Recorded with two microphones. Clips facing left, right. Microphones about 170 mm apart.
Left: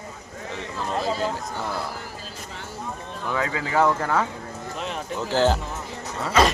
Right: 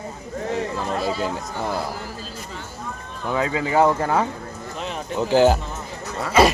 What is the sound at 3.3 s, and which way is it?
Speech, 20° right (ahead or behind).